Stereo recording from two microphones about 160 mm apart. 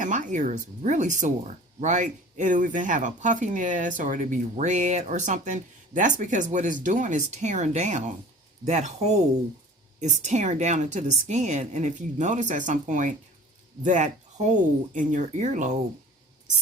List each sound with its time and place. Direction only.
0.0 s speech: 50° right (ahead or behind)